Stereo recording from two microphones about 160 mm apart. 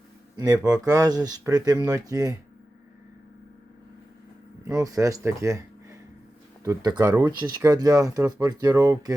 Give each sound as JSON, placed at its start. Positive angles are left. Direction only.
{"t": 0.3, "sound": "speech", "side_deg": -25}
{"t": 4.6, "sound": "speech", "side_deg": -20}